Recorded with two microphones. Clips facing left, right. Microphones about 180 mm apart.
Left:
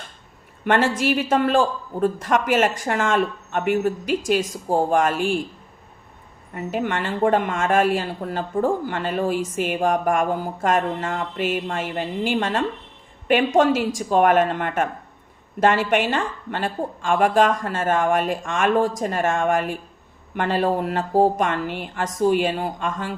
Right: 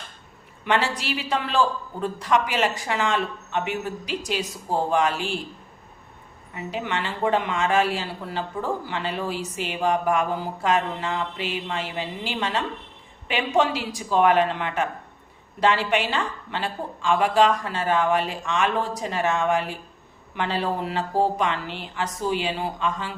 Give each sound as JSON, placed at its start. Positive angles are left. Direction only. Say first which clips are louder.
{"t": 0.6, "sound": "speech", "louder": "left 5 dB", "side_deg": 50}
{"t": 6.5, "sound": "speech", "louder": "left 4 dB", "side_deg": 50}